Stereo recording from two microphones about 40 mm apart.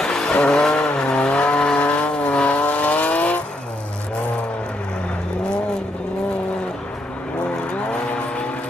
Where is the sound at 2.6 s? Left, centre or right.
Left; by 7.1 s centre.